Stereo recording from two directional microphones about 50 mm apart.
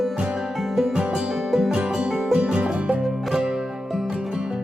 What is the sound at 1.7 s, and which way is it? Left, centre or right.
Music, centre.